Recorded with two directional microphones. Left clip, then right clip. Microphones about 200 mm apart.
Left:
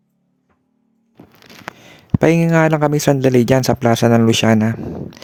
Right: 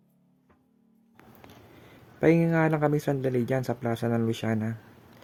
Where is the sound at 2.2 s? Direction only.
50° left (ahead or behind).